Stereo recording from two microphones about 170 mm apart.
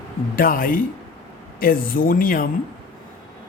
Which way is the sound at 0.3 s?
55° left (ahead or behind).